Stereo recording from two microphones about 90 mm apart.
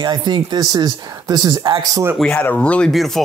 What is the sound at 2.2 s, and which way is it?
Speech, 10° left (ahead or behind).